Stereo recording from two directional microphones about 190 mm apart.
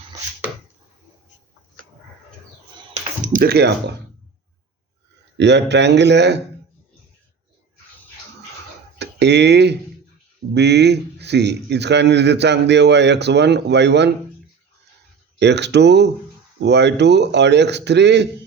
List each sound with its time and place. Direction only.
3.3 s speech: 55° right (ahead or behind)
5.4 s speech: 65° right (ahead or behind)
9.0 s speech: 65° right (ahead or behind)
15.4 s speech: 65° right (ahead or behind)